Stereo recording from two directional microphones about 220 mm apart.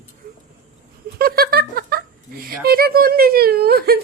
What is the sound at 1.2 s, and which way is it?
Speech, 45° right (ahead or behind).